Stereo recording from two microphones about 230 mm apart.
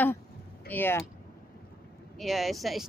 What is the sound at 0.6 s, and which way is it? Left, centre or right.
Speech, centre.